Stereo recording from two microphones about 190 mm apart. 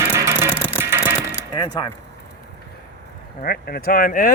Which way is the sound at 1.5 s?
20° left (ahead or behind).